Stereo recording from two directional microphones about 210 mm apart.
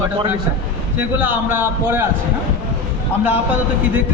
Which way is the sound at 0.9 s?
10° right (ahead or behind).